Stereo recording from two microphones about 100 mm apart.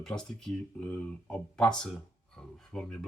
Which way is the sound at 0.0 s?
5° left (ahead or behind).